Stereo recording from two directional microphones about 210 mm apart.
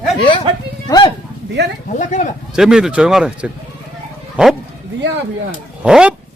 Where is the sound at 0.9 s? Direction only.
15° left (ahead or behind).